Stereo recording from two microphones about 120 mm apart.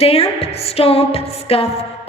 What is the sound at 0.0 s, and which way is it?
A woman's voice, 55° left (ahead or behind).